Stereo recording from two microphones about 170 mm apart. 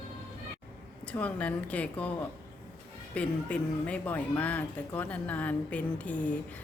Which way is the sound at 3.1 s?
10° left (ahead or behind).